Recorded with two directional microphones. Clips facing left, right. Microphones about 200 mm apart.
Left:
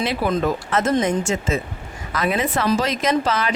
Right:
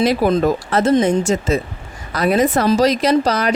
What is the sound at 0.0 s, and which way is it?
Speech, 40° right (ahead or behind).